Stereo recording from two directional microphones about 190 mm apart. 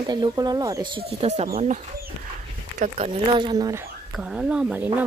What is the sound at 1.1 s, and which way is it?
Speech, 35° right (ahead or behind).